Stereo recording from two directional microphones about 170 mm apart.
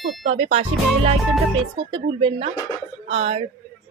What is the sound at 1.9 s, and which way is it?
A woman's voice, 35° right (ahead or behind).